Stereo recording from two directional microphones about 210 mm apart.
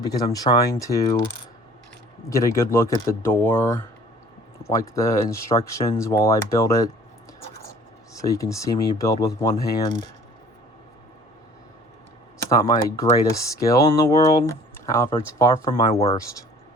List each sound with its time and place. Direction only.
0.0 s speech: 20° left (ahead or behind)
2.3 s speech: 15° left (ahead or behind)
8.1 s speech: 15° left (ahead or behind)
12.5 s speech: 15° left (ahead or behind)